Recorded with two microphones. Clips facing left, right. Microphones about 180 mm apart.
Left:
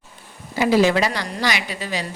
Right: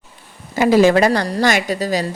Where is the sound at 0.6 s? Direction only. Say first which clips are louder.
Right 5 dB; 45° right (ahead or behind).